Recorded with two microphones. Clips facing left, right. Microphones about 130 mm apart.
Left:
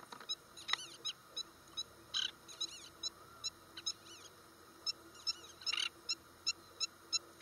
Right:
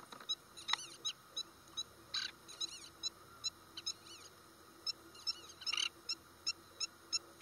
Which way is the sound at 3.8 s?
30° right (ahead or behind).